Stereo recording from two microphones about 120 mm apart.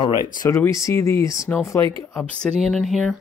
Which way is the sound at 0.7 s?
25° left (ahead or behind).